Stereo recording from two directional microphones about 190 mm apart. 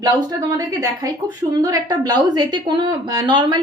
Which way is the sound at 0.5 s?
20° right (ahead or behind).